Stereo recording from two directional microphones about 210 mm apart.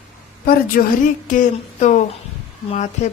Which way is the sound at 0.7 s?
45° left (ahead or behind).